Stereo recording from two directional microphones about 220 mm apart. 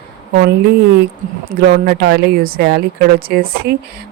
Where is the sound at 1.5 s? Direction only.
45° right (ahead or behind).